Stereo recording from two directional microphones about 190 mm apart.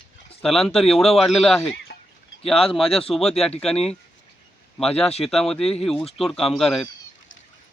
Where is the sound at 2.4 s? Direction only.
30° left (ahead or behind).